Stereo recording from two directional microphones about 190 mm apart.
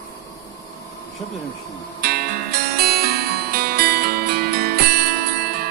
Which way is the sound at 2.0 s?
55° right (ahead or behind).